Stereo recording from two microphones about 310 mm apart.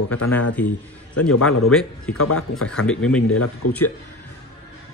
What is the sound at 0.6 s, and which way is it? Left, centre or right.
Speech, centre.